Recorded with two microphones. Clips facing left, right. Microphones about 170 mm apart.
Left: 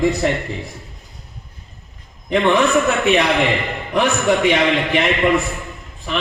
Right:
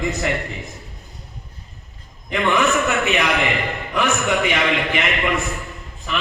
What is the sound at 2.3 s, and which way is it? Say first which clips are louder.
Speech: left 4 dB; 30° left (ahead or behind).